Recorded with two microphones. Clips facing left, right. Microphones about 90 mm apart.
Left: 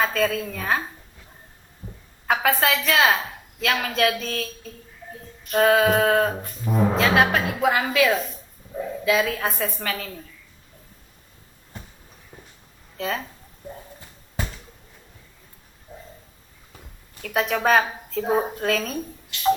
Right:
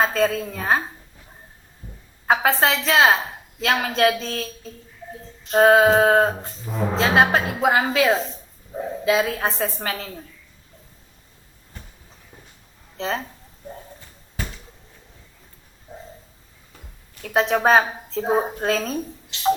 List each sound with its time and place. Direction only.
0.0 s a woman's voice: 35° right (ahead or behind)
2.2 s a woman's voice: 30° right (ahead or behind)
4.2 s a sound: 30° right (ahead or behind)
6.9 s a woman's voice: 30° right (ahead or behind)
13.0 s a woman's voice: 30° right (ahead or behind)
17.2 s a woman's voice: 35° right (ahead or behind)